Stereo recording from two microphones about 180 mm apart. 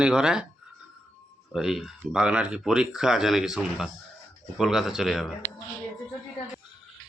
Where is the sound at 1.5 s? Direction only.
Centre (ahead or behind).